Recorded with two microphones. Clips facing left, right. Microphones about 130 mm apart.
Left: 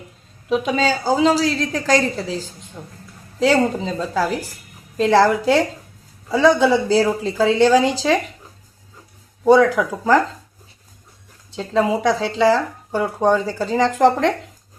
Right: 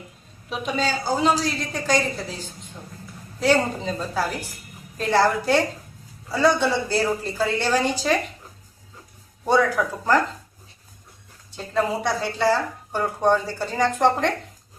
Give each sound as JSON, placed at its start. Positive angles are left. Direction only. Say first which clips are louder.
{"t": 0.5, "sound": "a woman's voice", "louder": "left 6 dB", "side_deg": 90}
{"t": 3.8, "sound": "a woman's voice", "louder": "left 4 dB", "side_deg": 90}
{"t": 9.6, "sound": "a woman's voice", "louder": "left 5 dB", "side_deg": 90}
{"t": 11.5, "sound": "a woman's voice", "louder": "left 5 dB", "side_deg": 90}